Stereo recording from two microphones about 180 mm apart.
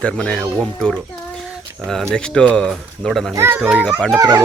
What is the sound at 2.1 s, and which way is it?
Speech, 5° left (ahead or behind).